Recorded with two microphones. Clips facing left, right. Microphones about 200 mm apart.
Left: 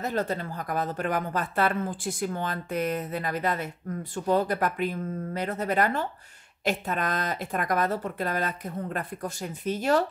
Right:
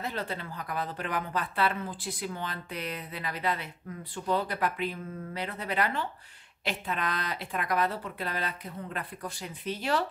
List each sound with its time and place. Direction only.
0.0 s speech: 45° left (ahead or behind)